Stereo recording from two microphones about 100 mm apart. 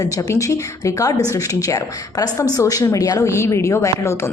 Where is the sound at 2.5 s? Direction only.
35° left (ahead or behind).